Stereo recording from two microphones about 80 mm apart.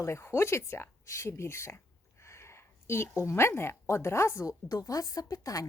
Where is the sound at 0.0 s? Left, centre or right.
Left.